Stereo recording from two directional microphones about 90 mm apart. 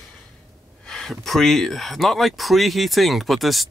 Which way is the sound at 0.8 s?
5° left (ahead or behind).